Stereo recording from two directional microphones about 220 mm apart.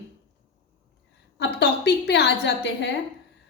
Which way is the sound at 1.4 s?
50° left (ahead or behind).